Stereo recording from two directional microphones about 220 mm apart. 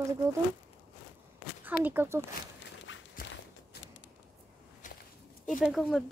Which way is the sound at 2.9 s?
55° left (ahead or behind).